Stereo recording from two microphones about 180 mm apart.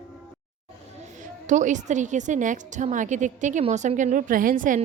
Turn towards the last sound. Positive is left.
turn(degrees=-45)  # may be behind; listen again after turning